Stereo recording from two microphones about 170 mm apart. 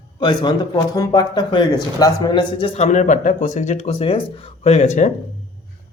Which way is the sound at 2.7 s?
40° left (ahead or behind).